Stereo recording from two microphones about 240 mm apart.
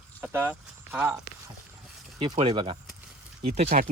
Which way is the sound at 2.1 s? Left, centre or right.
Right.